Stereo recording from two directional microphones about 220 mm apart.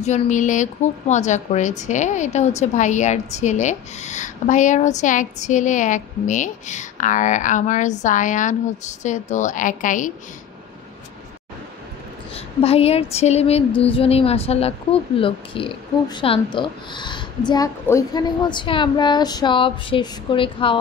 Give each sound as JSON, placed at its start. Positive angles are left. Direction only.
{"t": 0.0, "sound": "a woman's voice", "side_deg": 35}
{"t": 12.4, "sound": "a woman's voice", "side_deg": 25}